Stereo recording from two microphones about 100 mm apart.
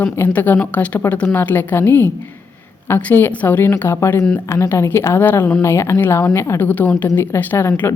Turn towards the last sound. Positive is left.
turn(degrees=25)  # may be behind; listen again after turning